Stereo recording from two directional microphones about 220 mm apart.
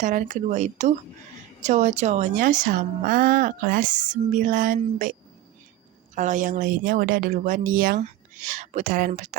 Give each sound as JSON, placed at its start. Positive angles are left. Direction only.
{"t": 0.0, "sound": "a woman's voice", "side_deg": -35}
{"t": 6.1, "sound": "a woman's voice", "side_deg": -35}